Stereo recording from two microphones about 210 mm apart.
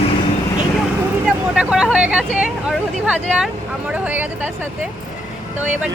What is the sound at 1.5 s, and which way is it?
Speech, 5° right (ahead or behind).